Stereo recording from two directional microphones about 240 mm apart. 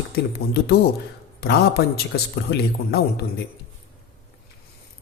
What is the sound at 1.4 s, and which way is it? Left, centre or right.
A man's voice, left.